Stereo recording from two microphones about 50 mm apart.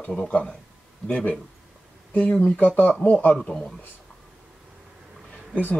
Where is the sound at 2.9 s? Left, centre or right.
Left.